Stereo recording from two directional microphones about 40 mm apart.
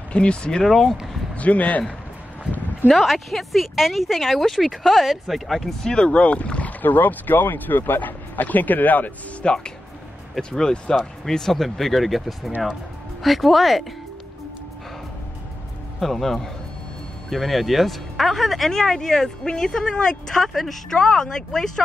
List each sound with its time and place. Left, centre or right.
0.1 s speech: left
0.7 s speech: centre
1.3 s speech: left
3.0 s speech: centre
5.6 s a woman's voice: centre
6.1 s speech: left
6.8 s speech: left
9.4 s a woman's voice: left; by 13.8 s centre
16.0 s a woman's voice: centre
21.0 s a woman's voice: centre